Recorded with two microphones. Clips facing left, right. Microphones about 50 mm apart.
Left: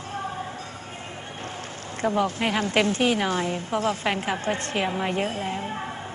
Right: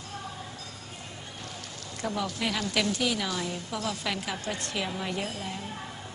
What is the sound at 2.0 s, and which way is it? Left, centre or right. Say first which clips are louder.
A woman's voice: left 8 dB; left.